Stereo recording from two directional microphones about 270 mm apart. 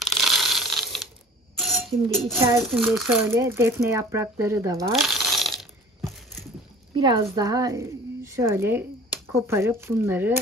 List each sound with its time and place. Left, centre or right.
0.0 s a sound: centre
2.4 s speech: centre
4.9 s coin: centre
7.0 s a woman's voice: centre